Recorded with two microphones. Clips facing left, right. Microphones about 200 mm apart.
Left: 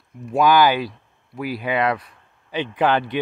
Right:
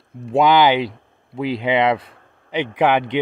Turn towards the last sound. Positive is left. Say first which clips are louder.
# right 3 dB
turn(degrees=-20)  # may be behind; listen again after turning